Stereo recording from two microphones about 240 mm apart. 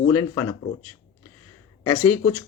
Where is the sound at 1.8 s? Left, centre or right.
Centre.